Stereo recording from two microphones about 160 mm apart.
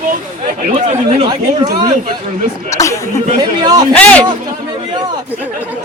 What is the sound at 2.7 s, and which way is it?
Speech, 20° left (ahead or behind).